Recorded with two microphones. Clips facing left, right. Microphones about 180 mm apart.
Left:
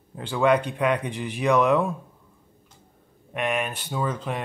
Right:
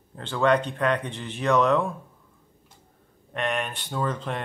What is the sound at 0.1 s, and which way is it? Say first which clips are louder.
Speech: left 1 dB; 10° left (ahead or behind).